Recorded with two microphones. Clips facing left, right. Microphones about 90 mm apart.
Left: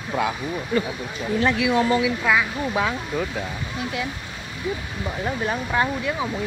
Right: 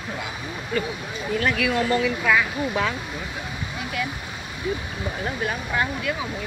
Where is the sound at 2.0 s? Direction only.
10° left (ahead or behind).